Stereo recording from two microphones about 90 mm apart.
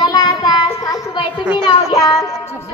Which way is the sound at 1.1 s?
60° left (ahead or behind).